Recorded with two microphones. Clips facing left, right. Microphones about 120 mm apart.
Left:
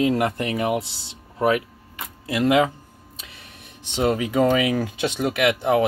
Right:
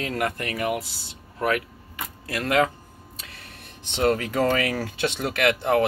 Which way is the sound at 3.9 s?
10° left (ahead or behind).